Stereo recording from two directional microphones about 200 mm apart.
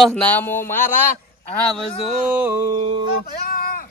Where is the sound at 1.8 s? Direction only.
5° right (ahead or behind).